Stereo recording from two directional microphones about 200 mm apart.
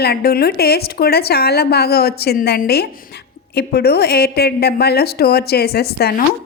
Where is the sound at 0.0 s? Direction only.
50° left (ahead or behind).